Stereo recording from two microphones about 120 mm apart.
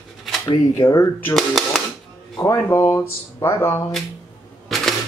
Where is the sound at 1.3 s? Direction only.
Centre (ahead or behind).